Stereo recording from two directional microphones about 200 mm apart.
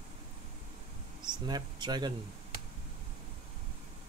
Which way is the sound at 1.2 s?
20° right (ahead or behind).